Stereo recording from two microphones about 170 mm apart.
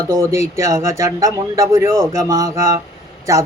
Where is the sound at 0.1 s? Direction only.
20° right (ahead or behind).